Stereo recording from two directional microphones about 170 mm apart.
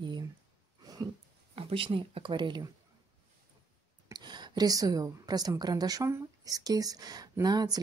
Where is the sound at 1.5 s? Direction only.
35° right (ahead or behind).